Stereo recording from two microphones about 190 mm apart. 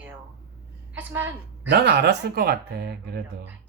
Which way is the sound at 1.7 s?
55° right (ahead or behind).